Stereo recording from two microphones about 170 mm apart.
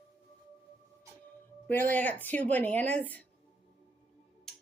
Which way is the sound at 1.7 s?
10° left (ahead or behind).